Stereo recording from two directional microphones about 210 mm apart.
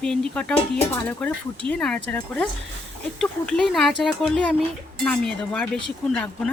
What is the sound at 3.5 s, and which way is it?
A woman's voice, centre (ahead or behind).